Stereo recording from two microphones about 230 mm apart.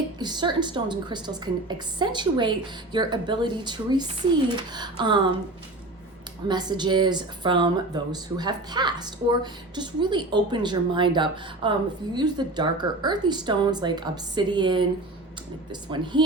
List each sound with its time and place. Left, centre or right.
0.2 s speech: centre
6.5 s speech: centre